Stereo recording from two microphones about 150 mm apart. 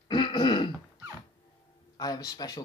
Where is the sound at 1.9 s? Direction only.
25° left (ahead or behind).